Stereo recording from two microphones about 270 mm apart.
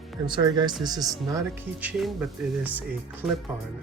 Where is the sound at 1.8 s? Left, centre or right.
Centre.